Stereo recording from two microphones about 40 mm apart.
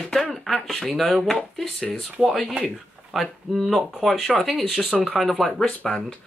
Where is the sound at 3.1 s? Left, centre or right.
Centre.